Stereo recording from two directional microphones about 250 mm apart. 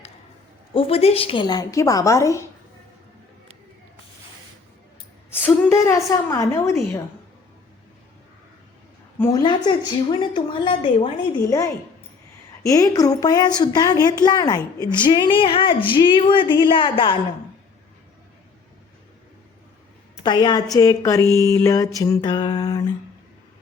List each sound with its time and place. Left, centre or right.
0.7 s speech: left
5.3 s a sound: centre
6.1 s speech: centre
9.1 s speech: centre
20.2 s speech: centre